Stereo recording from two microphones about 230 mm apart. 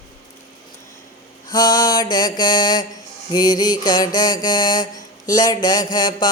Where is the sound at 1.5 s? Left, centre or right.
Centre.